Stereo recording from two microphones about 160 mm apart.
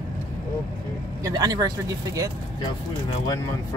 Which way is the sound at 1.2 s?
25° right (ahead or behind).